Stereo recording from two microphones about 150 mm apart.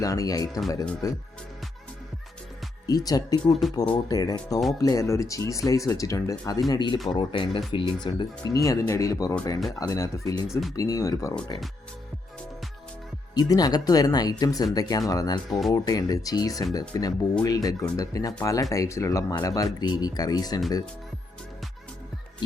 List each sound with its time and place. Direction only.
0.0 s speech: 20° left (ahead or behind)
2.8 s speech: 25° left (ahead or behind)
3.4 s speech: centre (ahead or behind)
3.9 s speech: 25° left (ahead or behind)
13.3 s speech: 25° left (ahead or behind)